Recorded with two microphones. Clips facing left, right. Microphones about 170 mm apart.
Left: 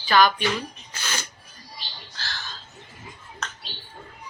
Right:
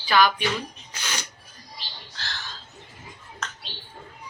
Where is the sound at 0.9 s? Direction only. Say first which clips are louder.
Left 1 dB; 15° right (ahead or behind).